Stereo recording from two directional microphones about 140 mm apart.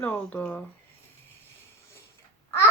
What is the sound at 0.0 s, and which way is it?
Speech, 10° left (ahead or behind).